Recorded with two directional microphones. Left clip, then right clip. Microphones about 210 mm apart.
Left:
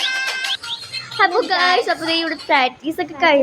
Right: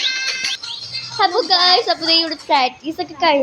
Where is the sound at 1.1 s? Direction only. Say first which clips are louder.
Right 1 dB; 5° left (ahead or behind).